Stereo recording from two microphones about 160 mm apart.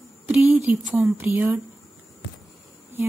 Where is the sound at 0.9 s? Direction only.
10° right (ahead or behind).